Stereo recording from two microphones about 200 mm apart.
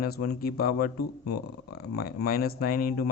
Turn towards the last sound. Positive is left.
turn(degrees=45)  # may be behind; listen again after turning